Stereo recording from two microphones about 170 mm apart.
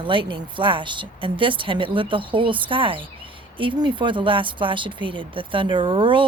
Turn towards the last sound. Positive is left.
turn(degrees=-30)  # may be behind; listen again after turning